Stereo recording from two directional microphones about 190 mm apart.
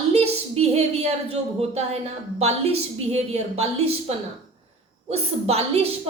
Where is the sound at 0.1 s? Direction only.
30° right (ahead or behind).